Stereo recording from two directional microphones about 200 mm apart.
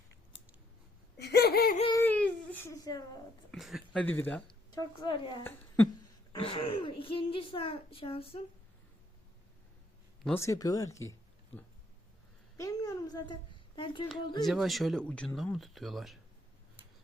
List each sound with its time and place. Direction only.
1.2 s laughter: 55° left (ahead or behind)
2.0 s baby cry: 10° left (ahead or behind)
3.5 s speech: centre (ahead or behind)
5.0 s a woman's voice: 25° left (ahead or behind)
5.4 s speech: 10° left (ahead or behind)
6.4 s a woman's voice: 30° left (ahead or behind)
10.2 s speech: 15° left (ahead or behind)
12.5 s a woman's voice: 15° left (ahead or behind)
14.4 s speech: centre (ahead or behind)